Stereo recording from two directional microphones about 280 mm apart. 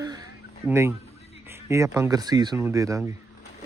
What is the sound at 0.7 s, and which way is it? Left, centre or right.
Speech, centre.